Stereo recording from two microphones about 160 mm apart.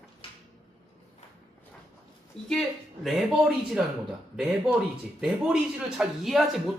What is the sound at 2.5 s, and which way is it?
Speech, centre (ahead or behind).